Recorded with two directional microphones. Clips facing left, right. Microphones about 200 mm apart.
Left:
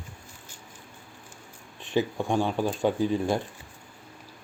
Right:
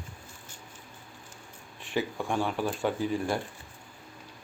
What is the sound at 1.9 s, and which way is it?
Speech, 20° left (ahead or behind).